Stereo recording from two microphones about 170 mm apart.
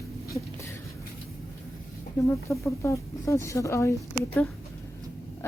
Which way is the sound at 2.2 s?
15° left (ahead or behind).